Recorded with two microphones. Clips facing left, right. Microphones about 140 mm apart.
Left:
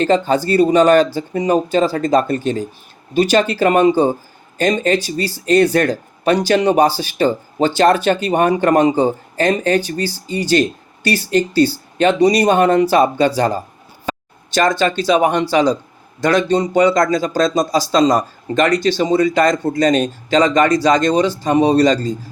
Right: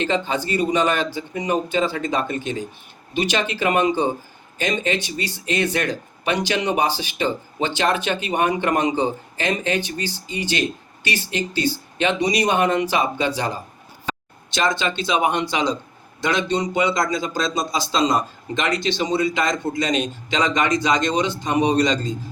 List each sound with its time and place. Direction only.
0.0 s speech: 40° left (ahead or behind)